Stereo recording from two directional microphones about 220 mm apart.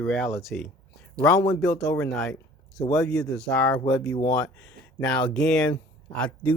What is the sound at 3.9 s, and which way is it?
Speech, 15° left (ahead or behind).